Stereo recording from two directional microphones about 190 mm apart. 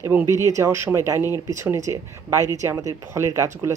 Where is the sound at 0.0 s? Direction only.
10° right (ahead or behind).